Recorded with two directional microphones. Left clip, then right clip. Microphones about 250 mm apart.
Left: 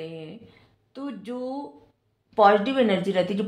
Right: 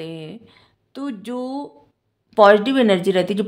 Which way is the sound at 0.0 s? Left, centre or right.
Right.